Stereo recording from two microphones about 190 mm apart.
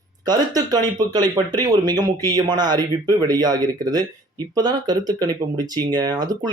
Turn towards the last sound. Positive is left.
turn(degrees=-20)  # may be behind; listen again after turning